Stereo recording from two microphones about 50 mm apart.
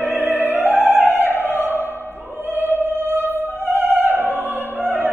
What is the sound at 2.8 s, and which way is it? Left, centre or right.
Music, right.